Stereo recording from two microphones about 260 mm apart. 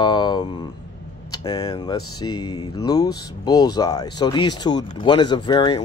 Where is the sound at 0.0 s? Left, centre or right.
Centre.